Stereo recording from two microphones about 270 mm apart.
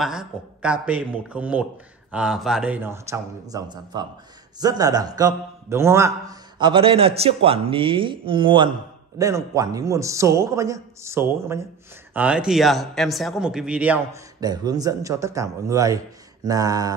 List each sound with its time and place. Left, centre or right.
0.0 s a man's voice: centre